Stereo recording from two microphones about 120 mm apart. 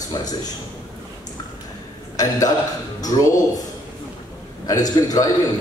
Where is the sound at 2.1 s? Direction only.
30° left (ahead or behind).